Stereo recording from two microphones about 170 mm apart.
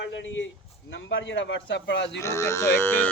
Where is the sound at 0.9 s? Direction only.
90° left.